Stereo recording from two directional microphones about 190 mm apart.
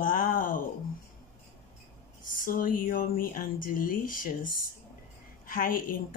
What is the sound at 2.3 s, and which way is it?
Speech, 45° left (ahead or behind).